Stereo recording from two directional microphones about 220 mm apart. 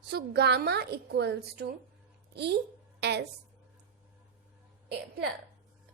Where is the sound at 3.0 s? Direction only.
50° right (ahead or behind).